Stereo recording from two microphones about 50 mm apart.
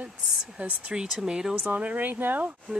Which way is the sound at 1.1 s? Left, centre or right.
Centre.